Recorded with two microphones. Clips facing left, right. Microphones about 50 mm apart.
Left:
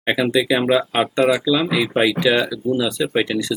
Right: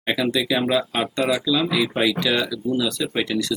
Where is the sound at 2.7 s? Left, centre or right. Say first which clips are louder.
Left 4 dB; centre.